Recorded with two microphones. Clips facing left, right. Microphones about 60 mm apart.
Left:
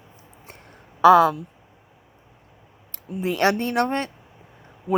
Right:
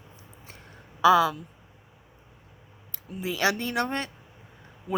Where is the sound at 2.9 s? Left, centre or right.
Left.